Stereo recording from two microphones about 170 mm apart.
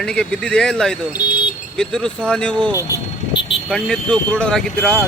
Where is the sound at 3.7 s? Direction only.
5° left (ahead or behind).